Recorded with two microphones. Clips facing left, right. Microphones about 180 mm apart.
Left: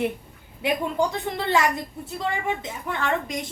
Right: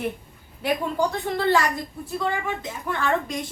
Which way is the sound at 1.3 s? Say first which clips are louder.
Right 1 dB; 20° left (ahead or behind).